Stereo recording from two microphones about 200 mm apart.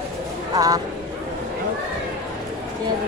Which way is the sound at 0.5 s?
15° right (ahead or behind).